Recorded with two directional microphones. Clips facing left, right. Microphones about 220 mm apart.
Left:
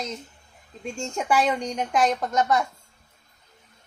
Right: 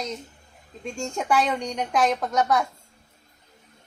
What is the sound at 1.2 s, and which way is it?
Speech, 5° left (ahead or behind).